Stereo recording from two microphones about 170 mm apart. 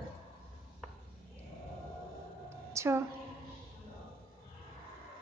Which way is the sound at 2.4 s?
15° right (ahead or behind).